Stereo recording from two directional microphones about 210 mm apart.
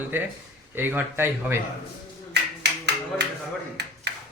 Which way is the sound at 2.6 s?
55° right (ahead or behind).